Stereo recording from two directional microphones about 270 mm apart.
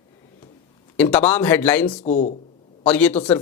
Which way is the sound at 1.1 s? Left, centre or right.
Centre.